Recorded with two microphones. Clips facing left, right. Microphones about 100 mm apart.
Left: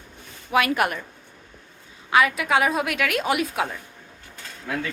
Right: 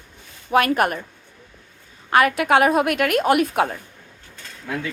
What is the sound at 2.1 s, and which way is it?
A woman's voice, 50° right (ahead or behind).